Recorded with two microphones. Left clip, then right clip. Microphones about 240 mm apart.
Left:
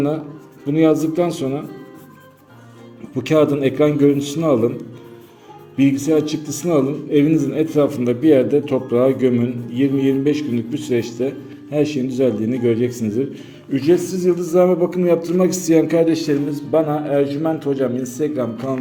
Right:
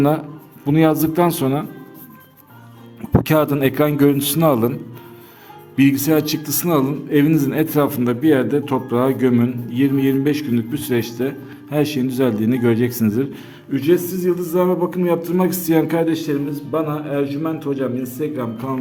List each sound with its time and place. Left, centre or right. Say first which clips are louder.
0.7 s a man's voice: even; right
3.2 s a man's voice: left 3 dB; right
5.7 s a man's voice: even; right
13.7 s a man's voice: left 1 dB; centre